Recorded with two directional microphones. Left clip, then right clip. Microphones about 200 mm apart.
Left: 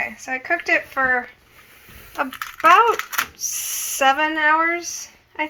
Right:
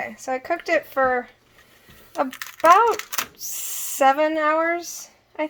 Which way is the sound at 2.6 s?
75° right (ahead or behind).